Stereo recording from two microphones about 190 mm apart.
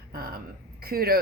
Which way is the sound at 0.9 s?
55° right (ahead or behind).